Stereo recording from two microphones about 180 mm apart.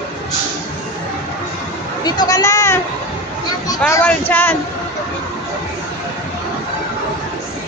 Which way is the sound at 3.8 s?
10° left (ahead or behind).